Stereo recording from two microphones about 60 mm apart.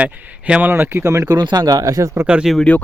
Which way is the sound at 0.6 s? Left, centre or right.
Right.